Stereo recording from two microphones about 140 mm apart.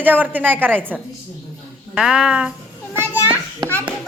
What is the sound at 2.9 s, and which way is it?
Children playing, 10° right (ahead or behind).